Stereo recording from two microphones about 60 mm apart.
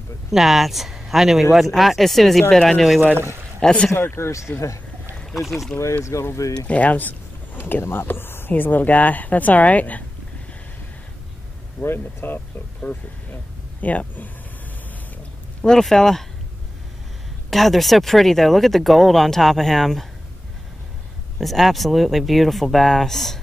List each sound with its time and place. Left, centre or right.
0.3 s speech: centre
3.0 s speech: right
3.6 s speech: centre
3.9 s speech: left
5.3 s speech: centre
6.1 s speech: left
6.6 s speech: left
11.8 s speech: left
12.8 s speech: left
15.6 s speech: centre
17.5 s speech: centre
21.4 s speech: centre